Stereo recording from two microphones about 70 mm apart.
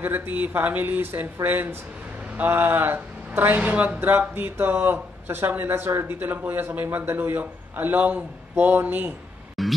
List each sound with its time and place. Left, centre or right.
0.0 s a man's voice: right
9.6 s scratch: centre